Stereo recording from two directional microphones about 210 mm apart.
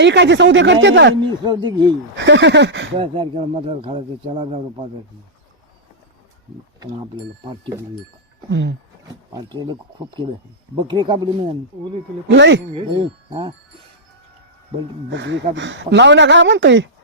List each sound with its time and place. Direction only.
0.0 s speech: 55° right (ahead or behind)
1.2 s speech: 20° right (ahead or behind)
2.1 s speech: 60° right (ahead or behind)
2.9 s speech: 25° right (ahead or behind)
8.4 s speech: 60° right (ahead or behind)
9.3 s speech: 20° right (ahead or behind)
10.8 s speech: 20° right (ahead or behind)
12.3 s speech: 60° right (ahead or behind)
12.7 s speech: 25° right (ahead or behind)
15.1 s speech: 60° right (ahead or behind)